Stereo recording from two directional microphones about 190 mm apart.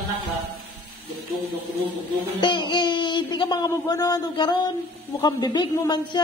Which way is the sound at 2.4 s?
25° left (ahead or behind).